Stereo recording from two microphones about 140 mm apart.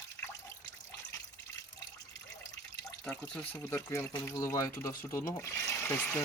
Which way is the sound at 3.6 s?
20° left (ahead or behind).